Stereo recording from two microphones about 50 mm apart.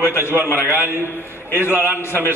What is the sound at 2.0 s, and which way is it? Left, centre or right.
Speech, left.